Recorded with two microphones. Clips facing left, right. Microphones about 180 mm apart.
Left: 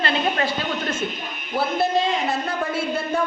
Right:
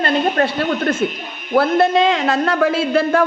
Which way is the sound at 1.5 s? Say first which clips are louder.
Right 7 dB; 90° right.